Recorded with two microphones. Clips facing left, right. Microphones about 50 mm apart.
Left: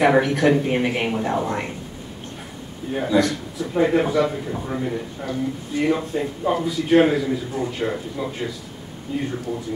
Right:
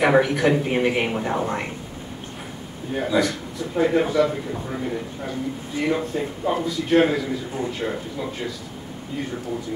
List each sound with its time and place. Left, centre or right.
0.0 s speech: centre
2.9 s speech: centre
3.7 s speech: centre
5.2 s speech: centre
5.8 s speech: centre
9.1 s speech: centre